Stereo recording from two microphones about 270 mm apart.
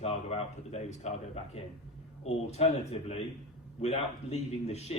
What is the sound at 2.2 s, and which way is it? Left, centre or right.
A man's voice, left.